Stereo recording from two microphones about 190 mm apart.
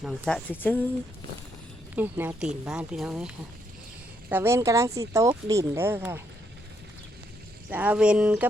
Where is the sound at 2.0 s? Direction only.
10° right (ahead or behind).